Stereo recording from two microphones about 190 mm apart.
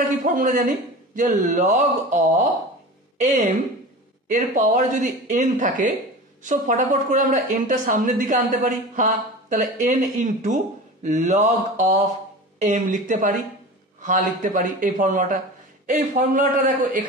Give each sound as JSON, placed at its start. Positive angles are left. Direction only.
{"t": 0.0, "sound": "a man's voice", "side_deg": -45}